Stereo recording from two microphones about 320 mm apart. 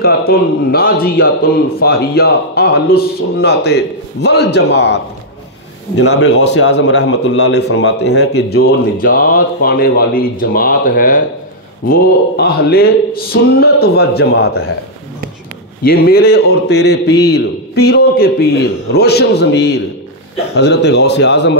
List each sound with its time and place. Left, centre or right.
0.0 s a man's voice: left
11.9 s music: left
15.8 s a man's voice: left